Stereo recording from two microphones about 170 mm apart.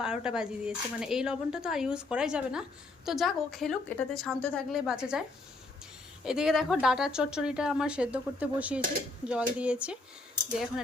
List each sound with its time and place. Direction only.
0.0 s speech: 5° right (ahead or behind)
6.2 s speech: 5° right (ahead or behind)